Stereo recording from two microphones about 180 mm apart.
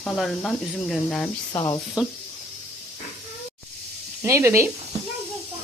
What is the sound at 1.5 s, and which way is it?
Speech, 15° left (ahead or behind).